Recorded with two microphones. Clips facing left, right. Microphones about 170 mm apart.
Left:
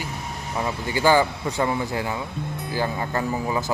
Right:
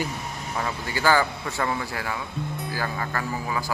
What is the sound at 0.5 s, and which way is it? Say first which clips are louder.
A man's voice: left 4 dB; 20° left (ahead or behind).